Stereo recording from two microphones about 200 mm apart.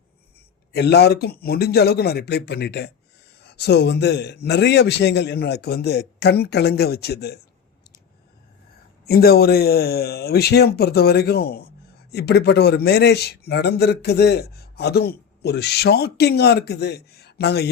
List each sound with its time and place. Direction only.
0.7 s a man's voice: 55° left (ahead or behind)
9.0 s a man's voice: 50° left (ahead or behind)